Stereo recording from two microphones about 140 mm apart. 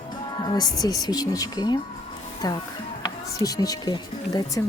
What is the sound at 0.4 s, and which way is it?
Speech, 30° left (ahead or behind).